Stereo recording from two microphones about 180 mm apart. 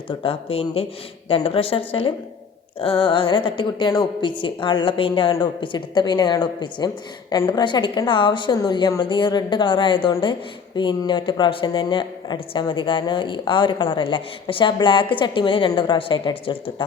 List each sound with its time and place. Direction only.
0.2 s a woman's voice: 30° left (ahead or behind)